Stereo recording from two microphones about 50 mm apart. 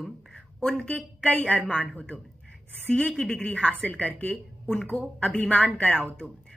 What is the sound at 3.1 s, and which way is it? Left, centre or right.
Speech, centre.